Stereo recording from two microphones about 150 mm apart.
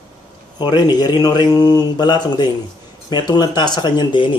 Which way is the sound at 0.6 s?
30° left (ahead or behind).